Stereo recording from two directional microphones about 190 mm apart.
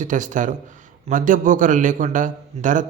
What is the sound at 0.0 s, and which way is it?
A man's voice, 40° right (ahead or behind).